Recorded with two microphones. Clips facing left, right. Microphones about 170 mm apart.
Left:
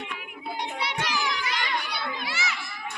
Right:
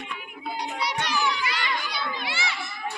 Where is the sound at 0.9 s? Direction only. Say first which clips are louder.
Right 3 dB; 90° left.